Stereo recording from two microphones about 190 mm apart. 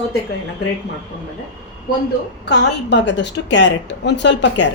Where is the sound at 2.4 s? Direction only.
65° left (ahead or behind).